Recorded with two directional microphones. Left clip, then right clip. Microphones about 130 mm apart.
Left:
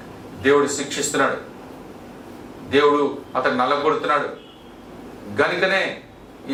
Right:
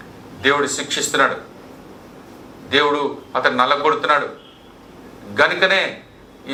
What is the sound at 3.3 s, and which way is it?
Speech, 35° right (ahead or behind).